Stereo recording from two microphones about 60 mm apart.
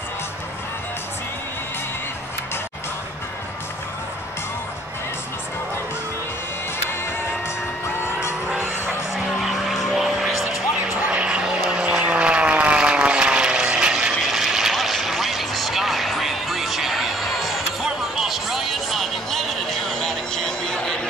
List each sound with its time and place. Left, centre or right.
8.5 s music: centre
9.1 s vehicle: centre
11.0 s vehicle: right; by 21.1 s centre